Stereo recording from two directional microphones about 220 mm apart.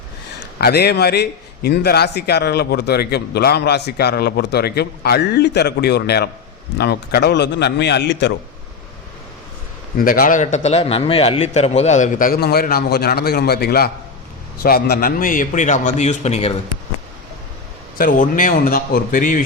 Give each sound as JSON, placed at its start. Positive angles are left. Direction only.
{"t": 0.6, "sound": "a man's voice", "side_deg": 45}
{"t": 10.0, "sound": "a man's voice", "side_deg": 40}
{"t": 17.9, "sound": "a man's voice", "side_deg": 40}